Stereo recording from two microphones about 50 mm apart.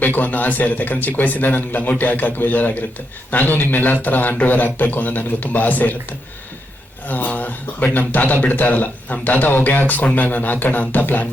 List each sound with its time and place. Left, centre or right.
0.2 s speech: left
7.1 s speech: left